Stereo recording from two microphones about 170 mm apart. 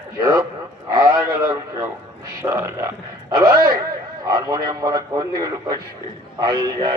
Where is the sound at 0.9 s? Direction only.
25° right (ahead or behind).